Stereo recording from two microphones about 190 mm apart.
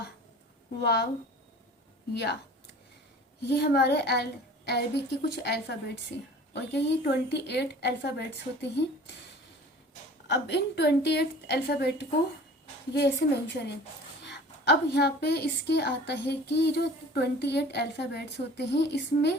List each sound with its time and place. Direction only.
0.8 s a woman's voice: 60° left (ahead or behind)
3.4 s a woman's voice: 60° left (ahead or behind)
10.2 s a woman's voice: 65° left (ahead or behind)